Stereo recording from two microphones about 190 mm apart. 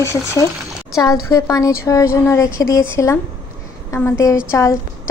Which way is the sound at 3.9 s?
15° left (ahead or behind).